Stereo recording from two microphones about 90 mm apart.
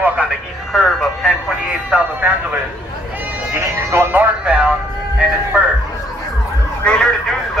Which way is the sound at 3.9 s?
25° right (ahead or behind).